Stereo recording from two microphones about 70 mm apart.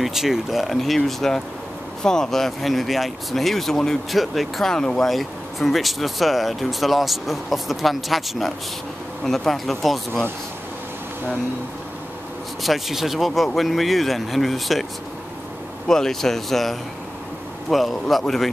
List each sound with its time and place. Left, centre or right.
0.0 s speech: centre
12.6 s speech: centre
15.9 s speech: centre